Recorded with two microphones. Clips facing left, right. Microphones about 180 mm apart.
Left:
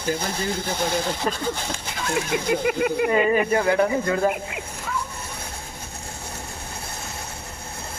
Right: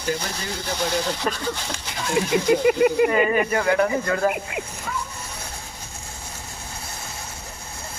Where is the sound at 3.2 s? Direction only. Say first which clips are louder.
Left 1 dB; 30° left (ahead or behind).